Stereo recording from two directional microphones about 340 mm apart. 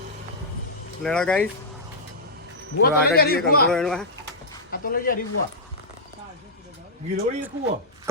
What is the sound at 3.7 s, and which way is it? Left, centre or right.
Speech, centre.